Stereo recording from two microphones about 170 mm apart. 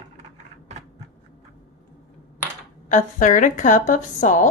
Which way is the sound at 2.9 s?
45° left (ahead or behind).